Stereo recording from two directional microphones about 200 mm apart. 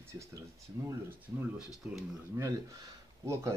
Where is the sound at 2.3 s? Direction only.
15° right (ahead or behind).